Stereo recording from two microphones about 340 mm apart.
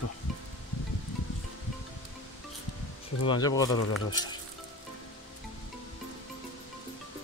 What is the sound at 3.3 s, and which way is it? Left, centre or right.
Speech, centre.